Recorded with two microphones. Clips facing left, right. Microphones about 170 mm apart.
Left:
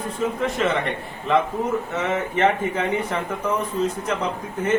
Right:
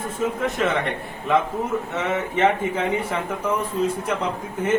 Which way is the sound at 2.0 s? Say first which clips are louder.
Right 1 dB; 10° right (ahead or behind).